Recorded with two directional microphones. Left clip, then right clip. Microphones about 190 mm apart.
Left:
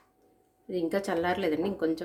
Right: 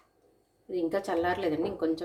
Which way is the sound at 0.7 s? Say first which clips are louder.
Even; 30° left (ahead or behind).